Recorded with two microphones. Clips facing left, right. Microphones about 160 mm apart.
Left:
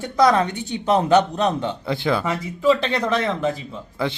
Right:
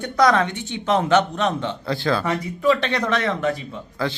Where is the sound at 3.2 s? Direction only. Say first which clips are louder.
Even; 30° left (ahead or behind).